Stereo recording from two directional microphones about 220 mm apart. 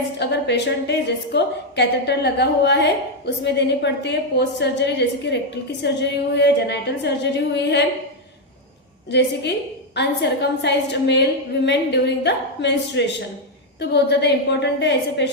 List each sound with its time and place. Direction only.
0.2 s a woman's voice: 50° left (ahead or behind)
9.0 s a woman's voice: 50° left (ahead or behind)